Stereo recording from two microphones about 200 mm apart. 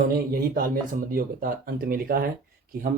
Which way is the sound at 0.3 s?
45° right (ahead or behind).